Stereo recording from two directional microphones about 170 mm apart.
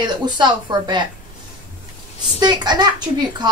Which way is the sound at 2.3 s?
25° right (ahead or behind).